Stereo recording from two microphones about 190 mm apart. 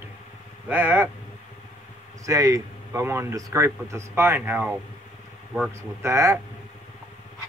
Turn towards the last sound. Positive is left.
turn(degrees=-15)  # may be behind; listen again after turning